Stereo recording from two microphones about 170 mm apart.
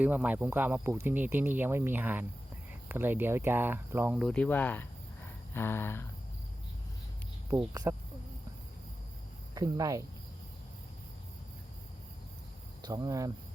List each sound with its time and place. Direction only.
0.0 s speech: 10° right (ahead or behind)
4.3 s speech: 10° left (ahead or behind)
7.5 s speech: 20° right (ahead or behind)
9.6 s speech: 20° right (ahead or behind)
12.8 s speech: 20° right (ahead or behind)